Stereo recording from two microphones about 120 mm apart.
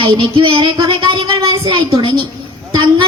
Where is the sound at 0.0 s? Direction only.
45° right (ahead or behind).